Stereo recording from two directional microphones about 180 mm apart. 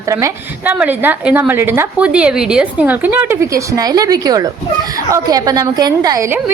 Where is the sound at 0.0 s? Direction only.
15° right (ahead or behind).